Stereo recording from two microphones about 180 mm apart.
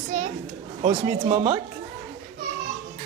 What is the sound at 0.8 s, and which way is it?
Speech, 40° right (ahead or behind).